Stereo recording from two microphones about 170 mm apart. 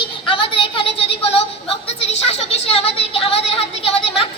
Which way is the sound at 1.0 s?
35° left (ahead or behind).